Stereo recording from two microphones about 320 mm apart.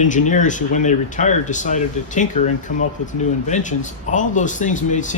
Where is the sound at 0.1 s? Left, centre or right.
Left.